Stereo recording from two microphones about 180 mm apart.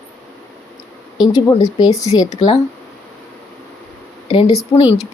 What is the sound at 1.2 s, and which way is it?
A woman's voice, 20° left (ahead or behind).